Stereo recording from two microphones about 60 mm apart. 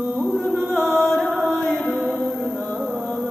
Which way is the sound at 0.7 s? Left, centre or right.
Centre.